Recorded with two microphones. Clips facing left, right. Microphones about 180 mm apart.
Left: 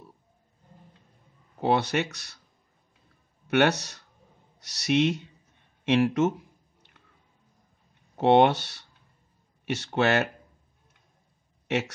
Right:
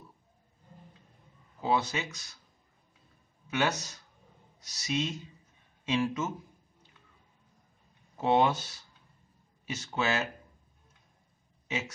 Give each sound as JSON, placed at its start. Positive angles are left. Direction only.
{"t": 1.6, "sound": "speech", "side_deg": 70}
{"t": 3.4, "sound": "speech", "side_deg": 70}
{"t": 8.2, "sound": "speech", "side_deg": 70}
{"t": 11.6, "sound": "a sound", "side_deg": 70}